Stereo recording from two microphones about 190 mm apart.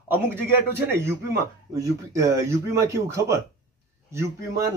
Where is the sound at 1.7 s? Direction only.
15° right (ahead or behind).